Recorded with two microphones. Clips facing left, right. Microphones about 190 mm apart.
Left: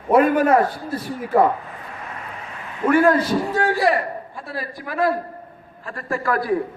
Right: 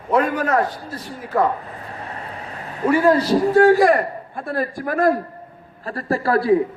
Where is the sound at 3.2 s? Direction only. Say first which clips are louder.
Right 7 dB; 40° right (ahead or behind).